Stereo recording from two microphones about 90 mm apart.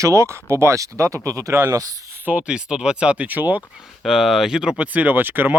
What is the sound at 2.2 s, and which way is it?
Speech, 15° right (ahead or behind).